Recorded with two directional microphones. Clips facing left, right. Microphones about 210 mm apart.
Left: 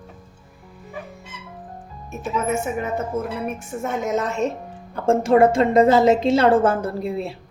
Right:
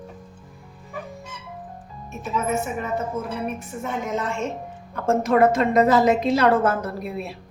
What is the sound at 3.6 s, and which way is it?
A woman's voice, 45° left (ahead or behind).